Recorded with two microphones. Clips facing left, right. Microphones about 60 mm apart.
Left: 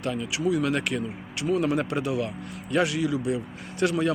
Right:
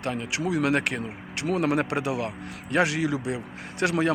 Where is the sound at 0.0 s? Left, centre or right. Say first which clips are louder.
Left 1 dB; right.